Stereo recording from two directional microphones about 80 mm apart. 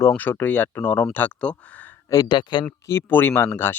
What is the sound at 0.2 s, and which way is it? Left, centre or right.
Speech, left.